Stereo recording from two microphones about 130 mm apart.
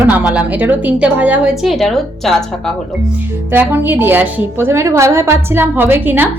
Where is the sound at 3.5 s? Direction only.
15° right (ahead or behind).